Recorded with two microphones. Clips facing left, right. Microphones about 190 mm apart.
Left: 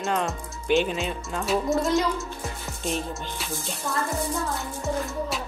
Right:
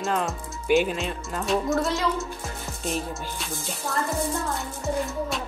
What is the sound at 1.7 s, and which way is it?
Speech, 20° left (ahead or behind).